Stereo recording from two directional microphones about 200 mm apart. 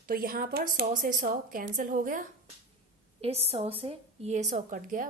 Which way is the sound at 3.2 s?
30° right (ahead or behind).